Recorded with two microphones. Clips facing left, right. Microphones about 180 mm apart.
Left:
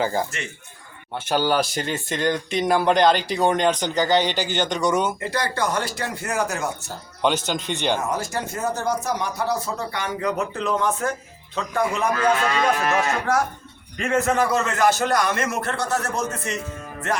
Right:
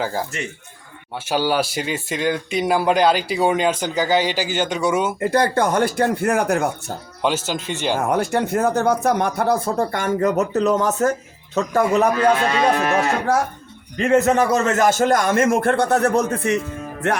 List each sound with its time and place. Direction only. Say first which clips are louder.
0.0 s speech: even; 5° right (ahead or behind)
5.2 s speech: right 7 dB; 50° right (ahead or behind)
7.2 s speech: even; 5° right (ahead or behind)
8.0 s a man's voice: right 7 dB; 60° right (ahead or behind); by 12.7 s 35° right (ahead or behind)
14.1 s a man's voice: right 5 dB; 45° right (ahead or behind)